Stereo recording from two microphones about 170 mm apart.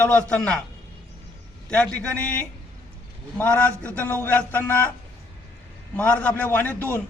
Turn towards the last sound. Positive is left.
turn(degrees=10)  # may be behind; listen again after turning